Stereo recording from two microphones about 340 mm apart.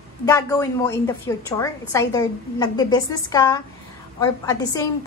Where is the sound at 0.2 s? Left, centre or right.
Centre.